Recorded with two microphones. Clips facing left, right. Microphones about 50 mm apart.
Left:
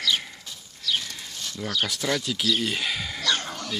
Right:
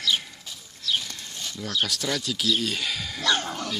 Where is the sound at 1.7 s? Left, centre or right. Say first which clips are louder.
Left 1 dB; centre.